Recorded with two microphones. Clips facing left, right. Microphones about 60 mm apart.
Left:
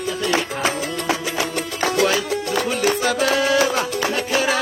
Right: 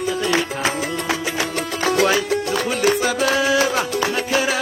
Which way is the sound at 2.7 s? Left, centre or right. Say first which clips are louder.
Right 2 dB; centre.